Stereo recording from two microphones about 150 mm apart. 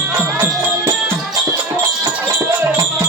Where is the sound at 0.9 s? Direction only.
15° right (ahead or behind).